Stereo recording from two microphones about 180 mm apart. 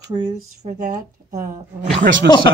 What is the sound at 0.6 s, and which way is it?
Speech, 40° right (ahead or behind).